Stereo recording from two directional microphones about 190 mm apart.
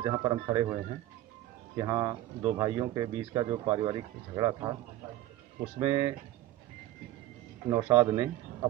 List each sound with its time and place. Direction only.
0.0 s speech: 20° right (ahead or behind)
1.8 s speech: 20° right (ahead or behind)
5.8 s speech: 20° right (ahead or behind)
7.7 s speech: 20° right (ahead or behind)